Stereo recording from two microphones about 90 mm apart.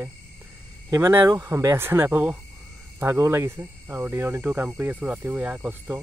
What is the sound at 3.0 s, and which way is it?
Speech, 25° right (ahead or behind).